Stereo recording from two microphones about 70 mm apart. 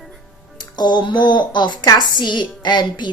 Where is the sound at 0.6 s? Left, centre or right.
Left.